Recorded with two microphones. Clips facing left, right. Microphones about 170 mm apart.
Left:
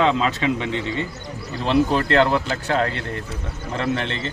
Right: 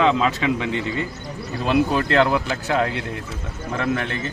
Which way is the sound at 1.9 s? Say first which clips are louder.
Even; 25° left (ahead or behind).